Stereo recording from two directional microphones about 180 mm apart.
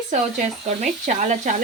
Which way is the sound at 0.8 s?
40° right (ahead or behind).